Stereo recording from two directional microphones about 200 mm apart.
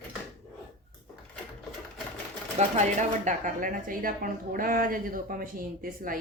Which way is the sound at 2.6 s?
35° right (ahead or behind).